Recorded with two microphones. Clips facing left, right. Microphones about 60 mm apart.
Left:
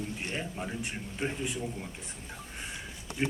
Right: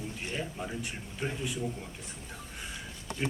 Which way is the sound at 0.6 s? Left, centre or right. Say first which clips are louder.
Left 1 dB; left.